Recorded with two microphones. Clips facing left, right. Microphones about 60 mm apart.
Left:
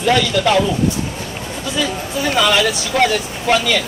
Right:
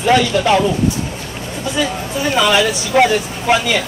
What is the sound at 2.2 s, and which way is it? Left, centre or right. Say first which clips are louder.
Speech: right 1 dB; centre.